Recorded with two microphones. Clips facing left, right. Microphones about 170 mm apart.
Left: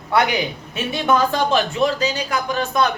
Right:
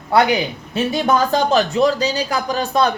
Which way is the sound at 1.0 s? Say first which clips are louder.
Even; 40° right (ahead or behind).